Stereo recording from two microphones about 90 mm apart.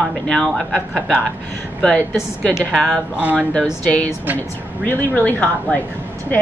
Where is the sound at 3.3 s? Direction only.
10° left (ahead or behind).